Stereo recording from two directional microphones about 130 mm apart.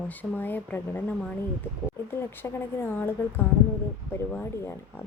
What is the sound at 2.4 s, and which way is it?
Speech, 15° left (ahead or behind).